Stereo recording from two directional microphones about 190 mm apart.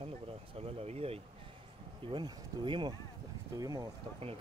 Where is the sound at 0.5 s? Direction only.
30° right (ahead or behind).